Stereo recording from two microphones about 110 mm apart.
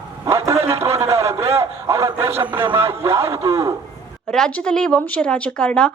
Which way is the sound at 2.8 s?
20° right (ahead or behind).